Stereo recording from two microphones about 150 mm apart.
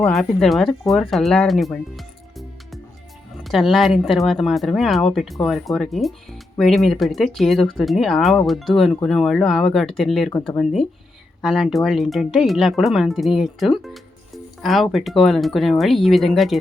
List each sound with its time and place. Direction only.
0.0 s speech: 5° left (ahead or behind)
3.4 s speech: centre (ahead or behind)